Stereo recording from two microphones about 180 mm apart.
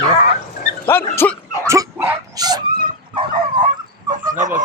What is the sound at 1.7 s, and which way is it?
Dog, 10° right (ahead or behind).